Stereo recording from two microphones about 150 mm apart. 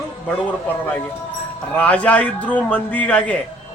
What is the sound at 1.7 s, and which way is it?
A man's voice, 10° left (ahead or behind).